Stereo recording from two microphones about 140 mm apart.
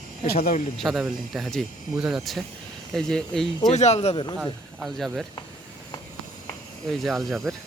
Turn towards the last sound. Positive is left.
turn(degrees=0)  # may be behind; listen again after turning